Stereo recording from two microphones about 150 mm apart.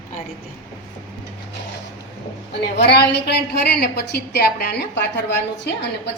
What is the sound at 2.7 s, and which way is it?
A woman's voice, 90° left.